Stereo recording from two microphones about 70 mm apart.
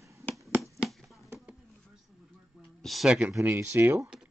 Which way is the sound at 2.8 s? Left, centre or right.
Centre.